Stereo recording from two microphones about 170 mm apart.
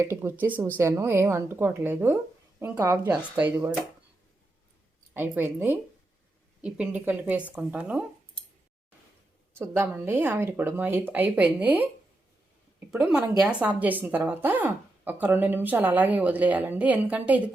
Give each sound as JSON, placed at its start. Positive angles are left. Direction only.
{"t": 0.0, "sound": "a woman's voice", "side_deg": -15}
{"t": 5.1, "sound": "a woman's voice", "side_deg": -10}
{"t": 9.6, "sound": "a woman's voice", "side_deg": -15}
{"t": 12.9, "sound": "a woman's voice", "side_deg": -5}